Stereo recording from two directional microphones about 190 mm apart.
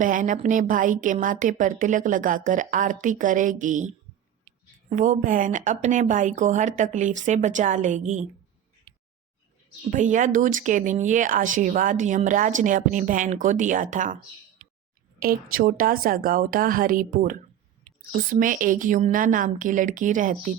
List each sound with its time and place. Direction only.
0.0 s speech: 45° right (ahead or behind)
9.9 s speech: 40° right (ahead or behind)
15.2 s speech: 50° right (ahead or behind)